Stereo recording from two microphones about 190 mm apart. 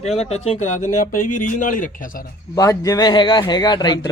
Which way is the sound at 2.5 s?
20° left (ahead or behind).